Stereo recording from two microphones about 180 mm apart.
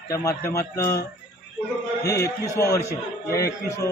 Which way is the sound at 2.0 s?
20° left (ahead or behind).